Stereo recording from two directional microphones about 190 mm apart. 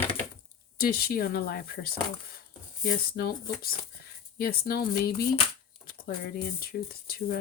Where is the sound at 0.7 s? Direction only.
50° left (ahead or behind).